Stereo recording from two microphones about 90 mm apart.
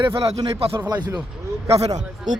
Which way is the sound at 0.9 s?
50° right (ahead or behind).